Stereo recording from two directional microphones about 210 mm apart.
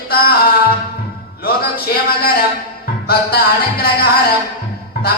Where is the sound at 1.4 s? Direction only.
45° left (ahead or behind).